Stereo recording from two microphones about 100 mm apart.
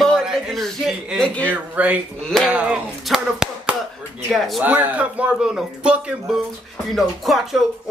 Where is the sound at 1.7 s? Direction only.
15° right (ahead or behind).